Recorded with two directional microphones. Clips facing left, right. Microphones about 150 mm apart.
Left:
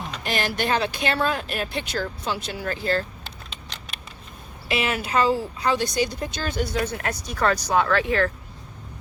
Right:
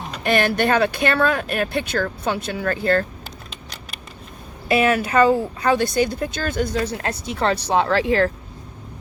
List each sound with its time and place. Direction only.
0.2 s speech: 60° right (ahead or behind)
4.7 s speech: 50° right (ahead or behind)
6.7 s speech: 30° right (ahead or behind)